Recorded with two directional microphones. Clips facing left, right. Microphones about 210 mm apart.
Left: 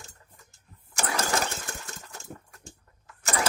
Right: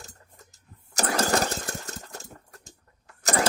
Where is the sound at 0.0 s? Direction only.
40° right (ahead or behind).